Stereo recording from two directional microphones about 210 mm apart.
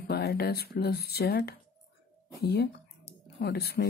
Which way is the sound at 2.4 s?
50° left (ahead or behind).